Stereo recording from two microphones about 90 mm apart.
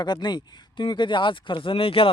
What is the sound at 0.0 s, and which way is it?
Speech, 55° left (ahead or behind).